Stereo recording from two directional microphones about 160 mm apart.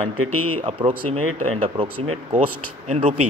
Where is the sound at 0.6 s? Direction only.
35° right (ahead or behind).